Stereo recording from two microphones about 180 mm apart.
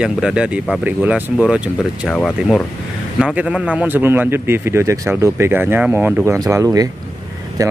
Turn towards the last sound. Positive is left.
turn(degrees=-20)  # may be behind; listen again after turning